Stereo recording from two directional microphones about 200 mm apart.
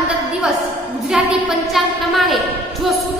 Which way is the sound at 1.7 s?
Centre (ahead or behind).